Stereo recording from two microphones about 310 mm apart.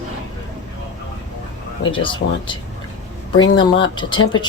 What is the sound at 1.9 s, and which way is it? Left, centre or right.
Speech, centre.